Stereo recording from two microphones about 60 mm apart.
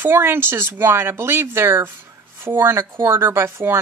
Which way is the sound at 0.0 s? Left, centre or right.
Right.